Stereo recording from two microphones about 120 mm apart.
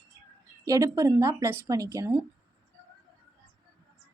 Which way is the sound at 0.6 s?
30° right (ahead or behind).